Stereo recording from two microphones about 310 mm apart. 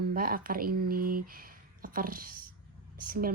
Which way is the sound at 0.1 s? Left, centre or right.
Right.